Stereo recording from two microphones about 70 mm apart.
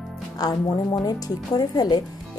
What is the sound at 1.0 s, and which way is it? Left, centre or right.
Speech, left.